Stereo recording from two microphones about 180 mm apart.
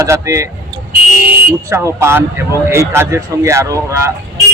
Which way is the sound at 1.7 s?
15° right (ahead or behind).